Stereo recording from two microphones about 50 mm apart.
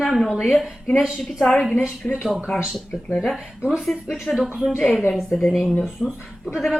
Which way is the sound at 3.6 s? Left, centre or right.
Centre.